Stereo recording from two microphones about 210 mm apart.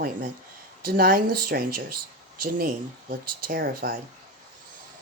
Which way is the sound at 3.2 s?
45° right (ahead or behind).